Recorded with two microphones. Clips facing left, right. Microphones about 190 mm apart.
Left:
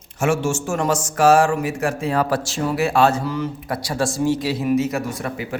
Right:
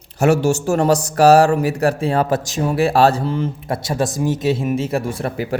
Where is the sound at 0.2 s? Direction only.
40° right (ahead or behind).